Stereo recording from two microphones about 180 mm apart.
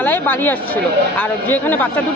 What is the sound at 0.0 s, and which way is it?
Speech, 10° left (ahead or behind).